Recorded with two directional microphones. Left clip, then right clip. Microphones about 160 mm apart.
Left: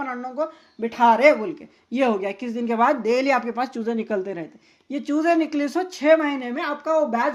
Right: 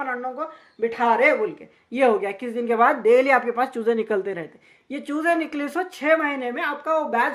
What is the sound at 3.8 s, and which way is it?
Speech, 20° left (ahead or behind).